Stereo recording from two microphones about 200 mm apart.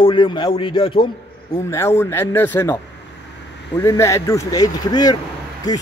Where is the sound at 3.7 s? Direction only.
15° left (ahead or behind).